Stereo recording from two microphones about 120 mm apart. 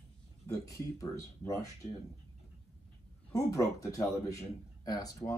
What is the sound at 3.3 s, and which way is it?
A man's voice, 25° left (ahead or behind).